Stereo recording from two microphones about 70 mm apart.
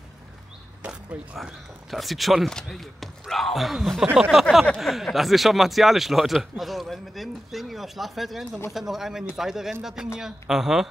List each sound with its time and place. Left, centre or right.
0.8 s speech: centre
1.9 s a woman's voice: centre